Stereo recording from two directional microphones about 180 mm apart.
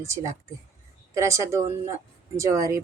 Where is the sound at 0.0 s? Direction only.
15° right (ahead or behind).